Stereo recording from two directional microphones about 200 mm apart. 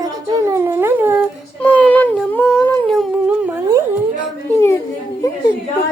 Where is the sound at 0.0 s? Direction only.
20° right (ahead or behind).